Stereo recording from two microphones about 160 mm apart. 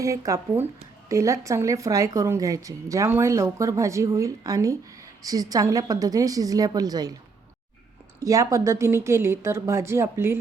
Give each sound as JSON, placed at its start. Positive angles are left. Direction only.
{"t": 0.0, "sound": "a woman's voice", "side_deg": -20}
{"t": 8.2, "sound": "a woman's voice", "side_deg": -20}